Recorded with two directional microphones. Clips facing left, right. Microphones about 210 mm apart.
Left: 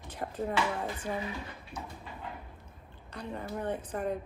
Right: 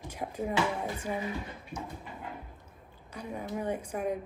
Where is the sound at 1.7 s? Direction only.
55° left (ahead or behind).